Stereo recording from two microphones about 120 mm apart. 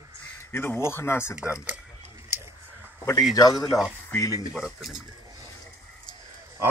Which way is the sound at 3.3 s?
30° left (ahead or behind).